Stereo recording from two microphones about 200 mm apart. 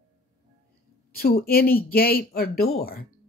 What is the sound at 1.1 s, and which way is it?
Speech, 50° left (ahead or behind).